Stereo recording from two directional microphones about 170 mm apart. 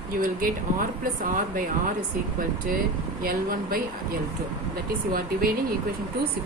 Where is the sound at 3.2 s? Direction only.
60° right (ahead or behind).